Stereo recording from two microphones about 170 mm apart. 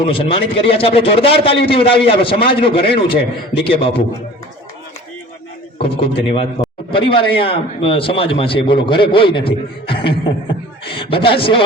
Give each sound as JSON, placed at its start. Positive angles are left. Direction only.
{"t": 0.0, "sound": "a man's voice", "side_deg": 30}
{"t": 5.8, "sound": "a man's voice", "side_deg": 35}